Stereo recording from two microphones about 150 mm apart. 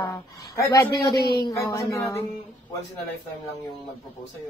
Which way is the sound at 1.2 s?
90° left.